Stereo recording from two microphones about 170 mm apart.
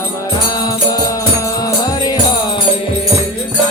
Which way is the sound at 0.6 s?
20° left (ahead or behind).